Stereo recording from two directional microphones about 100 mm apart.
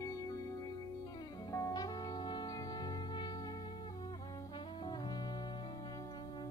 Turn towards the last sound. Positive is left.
turn(degrees=45)  # may be behind; listen again after turning